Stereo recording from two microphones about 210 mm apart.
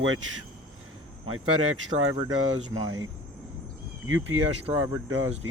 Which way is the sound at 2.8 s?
75° right (ahead or behind).